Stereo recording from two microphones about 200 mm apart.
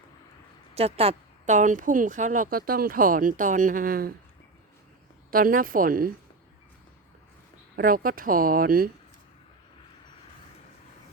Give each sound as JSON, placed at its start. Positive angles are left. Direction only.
{"t": 0.7, "sound": "a woman's voice", "side_deg": -30}
{"t": 5.3, "sound": "speech", "side_deg": -45}
{"t": 7.8, "sound": "speech", "side_deg": -45}